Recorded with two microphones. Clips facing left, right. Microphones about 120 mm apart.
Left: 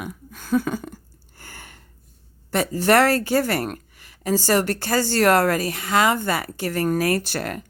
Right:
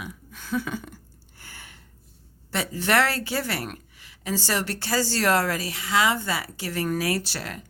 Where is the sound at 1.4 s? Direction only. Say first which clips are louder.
Left 4 dB; 45° left (ahead or behind).